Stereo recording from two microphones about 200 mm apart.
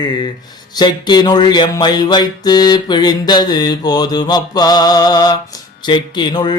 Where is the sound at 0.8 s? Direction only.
20° left (ahead or behind).